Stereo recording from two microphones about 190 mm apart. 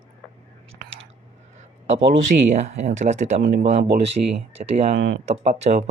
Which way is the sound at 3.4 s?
70° right (ahead or behind).